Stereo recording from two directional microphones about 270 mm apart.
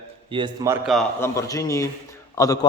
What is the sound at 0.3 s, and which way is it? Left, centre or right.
Speech, centre.